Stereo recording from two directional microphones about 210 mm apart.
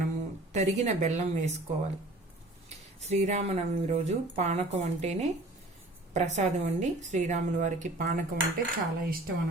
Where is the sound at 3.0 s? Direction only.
30° right (ahead or behind).